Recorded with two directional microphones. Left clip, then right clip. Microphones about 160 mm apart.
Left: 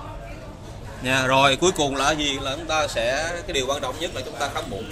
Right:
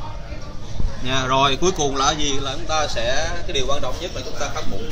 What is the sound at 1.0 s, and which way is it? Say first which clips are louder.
A man's voice: even; 45° left (ahead or behind).